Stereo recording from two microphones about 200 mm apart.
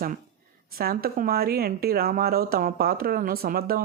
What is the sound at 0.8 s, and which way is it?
Speech, 50° right (ahead or behind).